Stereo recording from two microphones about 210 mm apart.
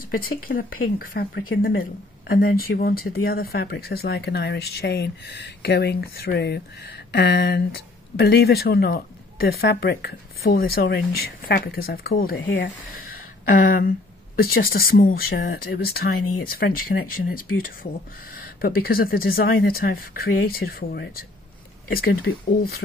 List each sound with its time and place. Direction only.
0.5 s speech: 60° left (ahead or behind)
13.5 s speech: 45° left (ahead or behind)
18.6 s speech: 45° left (ahead or behind)